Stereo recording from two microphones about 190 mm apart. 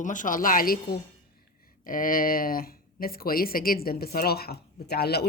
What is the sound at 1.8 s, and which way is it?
Speech, 45° left (ahead or behind).